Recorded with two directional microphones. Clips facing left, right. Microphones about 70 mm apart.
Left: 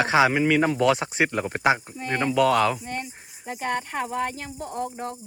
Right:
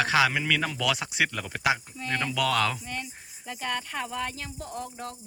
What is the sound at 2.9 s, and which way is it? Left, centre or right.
Speech, left.